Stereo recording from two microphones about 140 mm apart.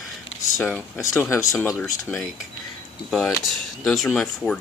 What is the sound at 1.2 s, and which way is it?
Speech, 20° left (ahead or behind).